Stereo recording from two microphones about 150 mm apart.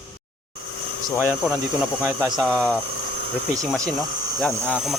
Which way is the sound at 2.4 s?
5° left (ahead or behind).